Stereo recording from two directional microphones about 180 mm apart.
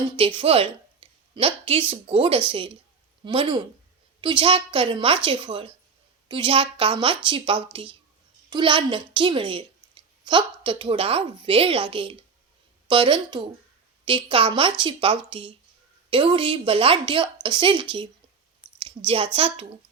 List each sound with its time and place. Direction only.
0.2 s a woman's voice: 30° right (ahead or behind)